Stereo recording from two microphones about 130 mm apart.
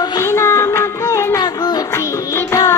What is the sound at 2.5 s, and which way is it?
Child singing, 20° left (ahead or behind).